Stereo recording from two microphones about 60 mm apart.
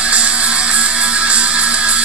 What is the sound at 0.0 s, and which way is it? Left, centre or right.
Music, centre.